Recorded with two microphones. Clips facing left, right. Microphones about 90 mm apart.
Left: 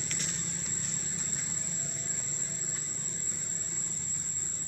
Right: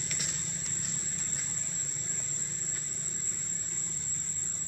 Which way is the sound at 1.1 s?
10° left (ahead or behind).